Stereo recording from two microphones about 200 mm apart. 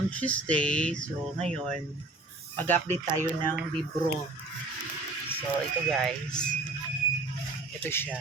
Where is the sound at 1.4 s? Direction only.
30° right (ahead or behind).